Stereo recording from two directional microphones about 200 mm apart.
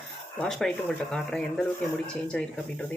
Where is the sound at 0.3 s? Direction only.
5° left (ahead or behind).